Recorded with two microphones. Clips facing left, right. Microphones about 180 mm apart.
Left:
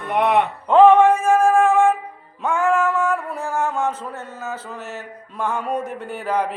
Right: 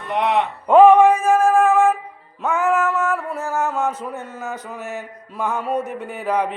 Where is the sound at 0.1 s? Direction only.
55° left (ahead or behind).